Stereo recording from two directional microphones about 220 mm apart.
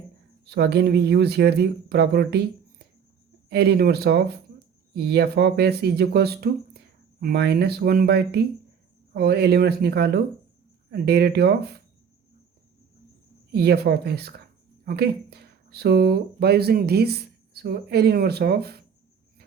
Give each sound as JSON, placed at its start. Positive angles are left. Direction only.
{"t": 0.4, "sound": "speech", "side_deg": -50}
{"t": 13.5, "sound": "speech", "side_deg": -45}